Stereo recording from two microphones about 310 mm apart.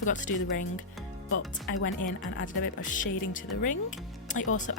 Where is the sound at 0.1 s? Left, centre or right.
Left.